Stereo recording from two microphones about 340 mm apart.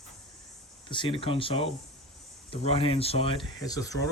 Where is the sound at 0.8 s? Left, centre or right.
Centre.